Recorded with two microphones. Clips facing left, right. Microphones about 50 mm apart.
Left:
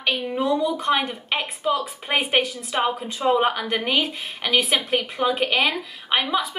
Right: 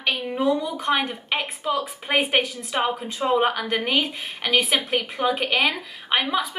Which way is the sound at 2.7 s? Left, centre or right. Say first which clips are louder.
Even; right.